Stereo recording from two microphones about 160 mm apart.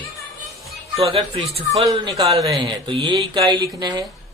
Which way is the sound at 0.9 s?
35° right (ahead or behind).